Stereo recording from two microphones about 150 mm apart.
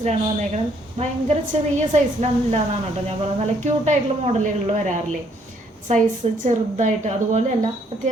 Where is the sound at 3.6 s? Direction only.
50° right (ahead or behind).